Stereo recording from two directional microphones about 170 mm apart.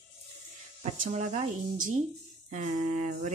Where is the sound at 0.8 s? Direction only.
45° right (ahead or behind).